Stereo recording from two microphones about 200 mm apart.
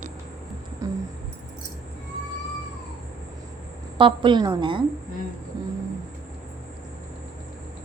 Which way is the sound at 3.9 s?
25° right (ahead or behind).